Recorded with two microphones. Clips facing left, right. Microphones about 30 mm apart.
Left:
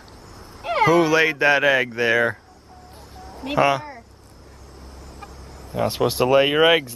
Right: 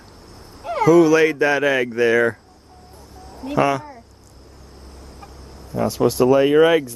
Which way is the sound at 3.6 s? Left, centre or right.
Left.